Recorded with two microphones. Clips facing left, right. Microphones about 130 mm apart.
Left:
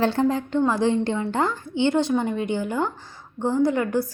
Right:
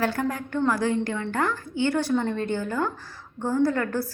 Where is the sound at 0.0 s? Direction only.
25° left (ahead or behind).